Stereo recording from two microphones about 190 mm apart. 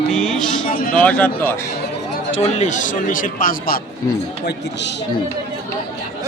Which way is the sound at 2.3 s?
35° left (ahead or behind).